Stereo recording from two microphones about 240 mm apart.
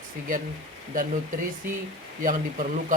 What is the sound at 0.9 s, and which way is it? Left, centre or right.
Speech, right.